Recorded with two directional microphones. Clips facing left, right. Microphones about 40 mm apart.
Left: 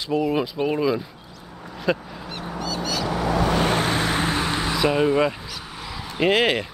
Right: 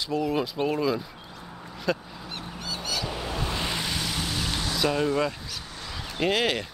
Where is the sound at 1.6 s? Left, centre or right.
Centre.